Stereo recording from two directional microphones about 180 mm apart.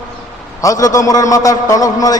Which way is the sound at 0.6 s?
20° left (ahead or behind).